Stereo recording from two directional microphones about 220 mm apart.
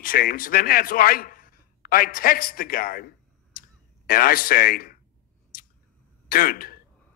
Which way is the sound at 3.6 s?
40° left (ahead or behind).